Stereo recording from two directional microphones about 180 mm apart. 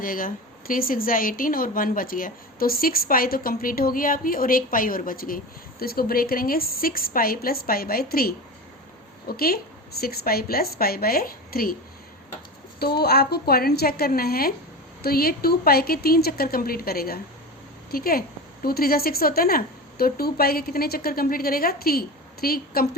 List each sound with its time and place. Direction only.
0.0 s a woman's voice: 50° left (ahead or behind)
12.8 s a woman's voice: 60° left (ahead or behind)